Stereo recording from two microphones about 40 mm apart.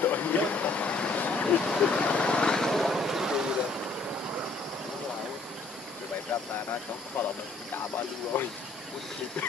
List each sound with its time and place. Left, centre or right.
0.0 s a sound: left
1.6 s vehicle: left
2.8 s vehicle: centre
6.3 s vehicle: left
7.2 s speech: left
8.3 s speech: left